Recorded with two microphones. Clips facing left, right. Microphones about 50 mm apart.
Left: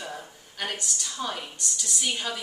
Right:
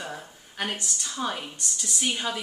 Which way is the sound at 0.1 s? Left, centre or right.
Centre.